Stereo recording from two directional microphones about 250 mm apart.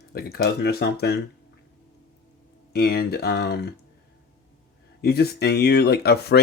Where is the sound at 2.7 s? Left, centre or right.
Left.